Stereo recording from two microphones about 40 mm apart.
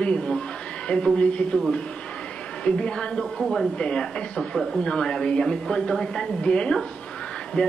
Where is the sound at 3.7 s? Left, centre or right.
Left.